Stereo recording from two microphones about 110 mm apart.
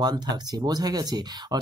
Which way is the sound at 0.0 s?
40° right (ahead or behind).